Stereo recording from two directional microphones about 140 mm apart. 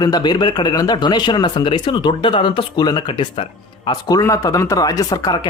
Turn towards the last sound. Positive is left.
turn(degrees=25)  # may be behind; listen again after turning